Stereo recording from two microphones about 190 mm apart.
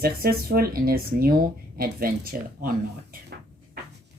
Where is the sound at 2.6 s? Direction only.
50° right (ahead or behind).